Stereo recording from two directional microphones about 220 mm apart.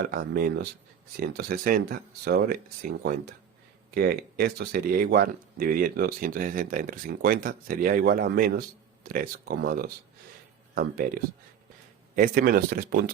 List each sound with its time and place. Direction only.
0.0 s speech: 40° right (ahead or behind)
3.9 s speech: 40° right (ahead or behind)